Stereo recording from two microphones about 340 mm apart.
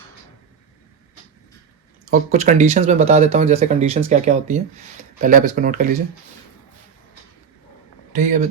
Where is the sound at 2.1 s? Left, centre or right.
Right.